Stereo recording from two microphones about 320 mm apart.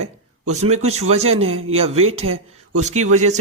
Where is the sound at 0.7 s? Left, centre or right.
Right.